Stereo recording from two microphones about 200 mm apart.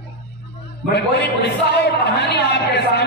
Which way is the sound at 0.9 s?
55° left (ahead or behind).